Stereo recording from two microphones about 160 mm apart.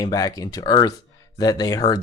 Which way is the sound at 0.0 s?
25° left (ahead or behind).